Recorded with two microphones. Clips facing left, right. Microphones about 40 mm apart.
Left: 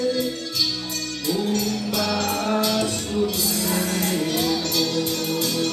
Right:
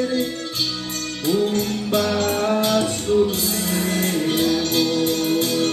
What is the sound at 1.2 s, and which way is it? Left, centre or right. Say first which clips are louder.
Music: right 4 dB; right.